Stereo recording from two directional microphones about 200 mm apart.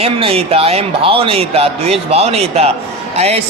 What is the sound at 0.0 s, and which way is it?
A man's voice, 30° right (ahead or behind).